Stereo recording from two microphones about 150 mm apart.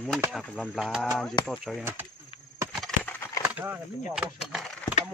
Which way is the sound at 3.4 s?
10° right (ahead or behind).